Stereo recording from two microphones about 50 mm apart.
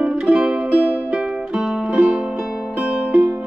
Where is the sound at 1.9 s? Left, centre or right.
Right.